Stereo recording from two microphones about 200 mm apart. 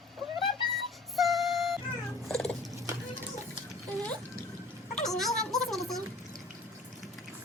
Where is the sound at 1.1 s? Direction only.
Centre (ahead or behind).